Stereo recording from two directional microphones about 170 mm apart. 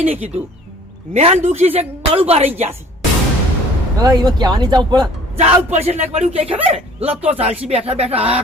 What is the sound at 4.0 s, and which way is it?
Speech, 25° right (ahead or behind).